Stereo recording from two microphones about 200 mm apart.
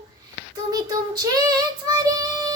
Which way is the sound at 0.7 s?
20° right (ahead or behind).